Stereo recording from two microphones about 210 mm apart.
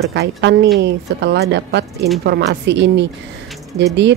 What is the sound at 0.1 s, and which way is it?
A woman's voice, 55° right (ahead or behind).